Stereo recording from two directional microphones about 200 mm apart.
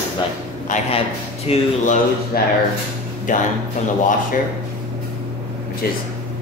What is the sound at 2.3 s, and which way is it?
A man's voice, 50° left (ahead or behind).